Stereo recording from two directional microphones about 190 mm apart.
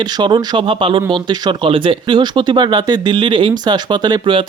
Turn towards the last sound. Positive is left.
turn(degrees=-25)  # may be behind; listen again after turning